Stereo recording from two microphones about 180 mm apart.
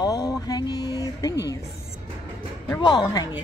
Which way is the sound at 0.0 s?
20° left (ahead or behind).